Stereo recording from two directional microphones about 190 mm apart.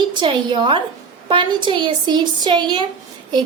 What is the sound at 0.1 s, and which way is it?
A woman's voice, 25° right (ahead or behind).